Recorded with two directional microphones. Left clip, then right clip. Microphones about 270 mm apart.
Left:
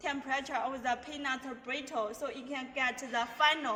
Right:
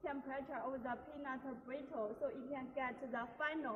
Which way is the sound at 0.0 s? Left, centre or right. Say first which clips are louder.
Left 10 dB; centre.